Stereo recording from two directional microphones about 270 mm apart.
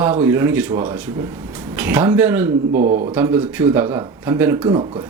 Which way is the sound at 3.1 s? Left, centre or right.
Centre.